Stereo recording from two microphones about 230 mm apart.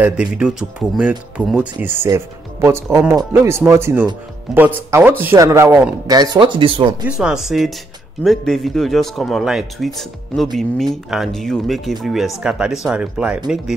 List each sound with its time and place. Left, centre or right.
0.0 s speech: centre; by 7.0 s right
7.1 s a man's voice: centre